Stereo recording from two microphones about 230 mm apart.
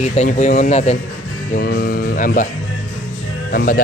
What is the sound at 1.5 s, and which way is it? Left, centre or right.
Speech, left.